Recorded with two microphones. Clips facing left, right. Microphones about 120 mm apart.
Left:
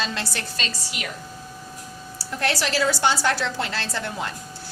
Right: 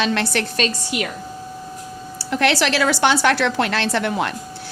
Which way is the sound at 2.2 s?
80° right.